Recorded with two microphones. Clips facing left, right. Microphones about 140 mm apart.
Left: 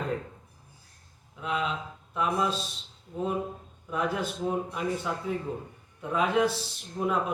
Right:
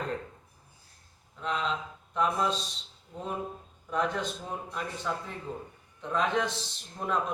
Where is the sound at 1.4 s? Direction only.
5° left (ahead or behind).